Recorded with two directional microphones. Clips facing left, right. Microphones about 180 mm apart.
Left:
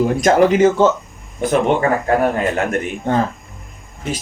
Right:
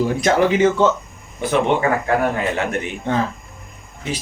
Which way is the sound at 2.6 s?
45° left (ahead or behind).